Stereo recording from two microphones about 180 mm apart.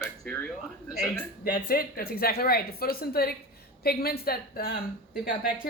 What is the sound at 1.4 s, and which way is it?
Speech, 55° left (ahead or behind).